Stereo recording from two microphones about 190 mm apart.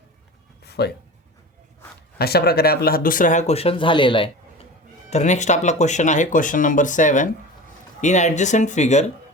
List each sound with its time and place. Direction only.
0.6 s a sound: 60° left (ahead or behind)
2.1 s speech: 55° left (ahead or behind); by 4.6 s 25° left (ahead or behind)
5.1 s speech: 40° left (ahead or behind)